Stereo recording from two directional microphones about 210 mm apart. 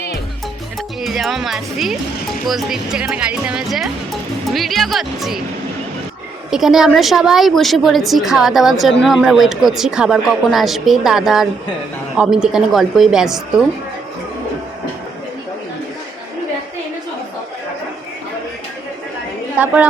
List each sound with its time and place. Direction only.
1.0 s speech: centre (ahead or behind)
6.5 s speech: centre (ahead or behind)
19.5 s a woman's voice: 5° right (ahead or behind)